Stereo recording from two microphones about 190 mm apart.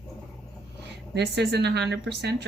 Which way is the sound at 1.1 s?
60° right (ahead or behind).